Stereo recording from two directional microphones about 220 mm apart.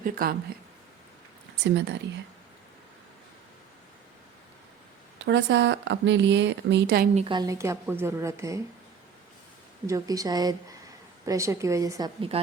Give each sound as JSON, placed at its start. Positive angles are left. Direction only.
{"t": 0.0, "sound": "speech", "side_deg": -40}
{"t": 1.6, "sound": "a woman's voice", "side_deg": -50}
{"t": 5.2, "sound": "a woman's voice", "side_deg": -55}
{"t": 7.2, "sound": "a woman's voice", "side_deg": -20}
{"t": 9.8, "sound": "a woman's voice", "side_deg": -15}